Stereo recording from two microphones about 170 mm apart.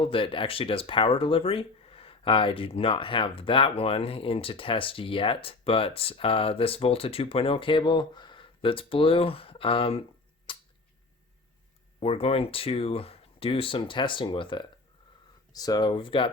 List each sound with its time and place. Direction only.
0.0 s speech: 30° left (ahead or behind)
10.5 s a sound: 30° left (ahead or behind)
11.9 s speech: 35° left (ahead or behind)